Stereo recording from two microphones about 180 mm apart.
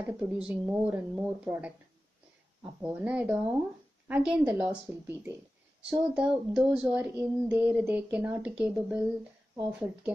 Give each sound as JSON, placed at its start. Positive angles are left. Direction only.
{"t": 0.2, "sound": "speech", "side_deg": -5}